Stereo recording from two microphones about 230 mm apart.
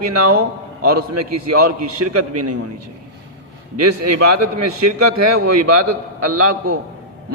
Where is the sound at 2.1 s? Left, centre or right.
Right.